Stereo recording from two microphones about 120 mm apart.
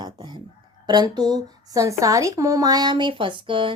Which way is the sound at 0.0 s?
35° right (ahead or behind).